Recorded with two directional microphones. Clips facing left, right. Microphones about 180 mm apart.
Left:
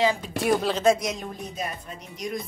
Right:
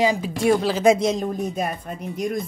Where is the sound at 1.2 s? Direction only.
50° right (ahead or behind).